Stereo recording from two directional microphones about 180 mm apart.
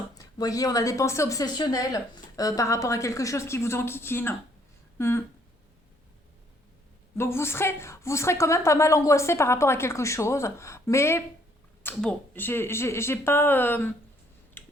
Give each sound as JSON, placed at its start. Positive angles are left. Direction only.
{"t": 0.2, "sound": "a woman's voice", "side_deg": 20}
{"t": 7.2, "sound": "a woman's voice", "side_deg": 15}
{"t": 14.6, "sound": "a sound", "side_deg": 10}